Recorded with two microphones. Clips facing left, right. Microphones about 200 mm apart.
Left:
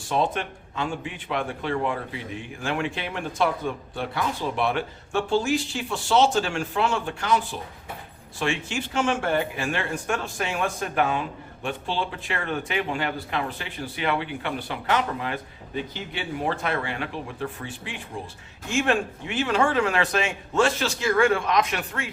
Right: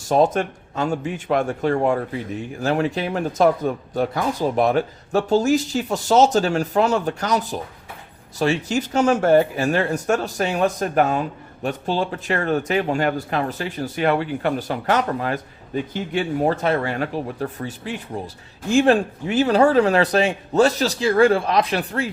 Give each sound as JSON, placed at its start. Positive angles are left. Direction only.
{"t": 0.0, "sound": "speech", "side_deg": -45}